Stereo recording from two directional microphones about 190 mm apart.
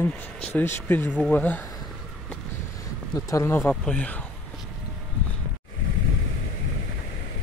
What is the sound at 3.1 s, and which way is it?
Speech, 15° left (ahead or behind).